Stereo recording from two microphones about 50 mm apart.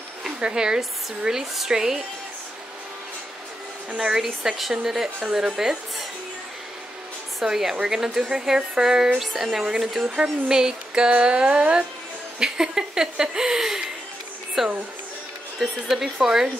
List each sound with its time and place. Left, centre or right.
0.2 s a woman's voice: centre
3.9 s a sound: right
4.2 s a woman's voice: centre
7.4 s a woman's voice: centre
11.1 s a sound: right
12.4 s a woman's voice: centre
14.6 s speech: centre
15.6 s a woman's voice: centre